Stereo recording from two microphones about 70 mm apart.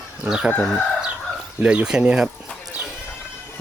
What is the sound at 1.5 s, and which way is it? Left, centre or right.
Speech, centre.